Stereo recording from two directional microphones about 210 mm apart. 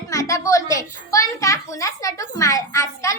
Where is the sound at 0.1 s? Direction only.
15° left (ahead or behind).